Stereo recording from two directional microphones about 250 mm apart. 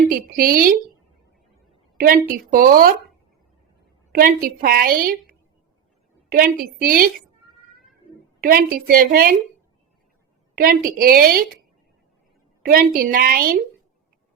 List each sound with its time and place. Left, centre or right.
0.3 s a woman's voice: right
2.0 s a woman's voice: right
4.1 s a woman's voice: right
6.3 s a woman's voice: right
8.4 s a woman's voice: right
10.5 s a woman's voice: right
12.6 s a woman's voice: right